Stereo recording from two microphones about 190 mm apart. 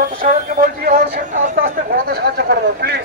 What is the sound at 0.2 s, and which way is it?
Speech, 45° right (ahead or behind).